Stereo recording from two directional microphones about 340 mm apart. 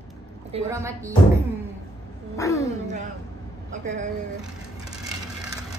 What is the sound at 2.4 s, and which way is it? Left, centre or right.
Speech, centre.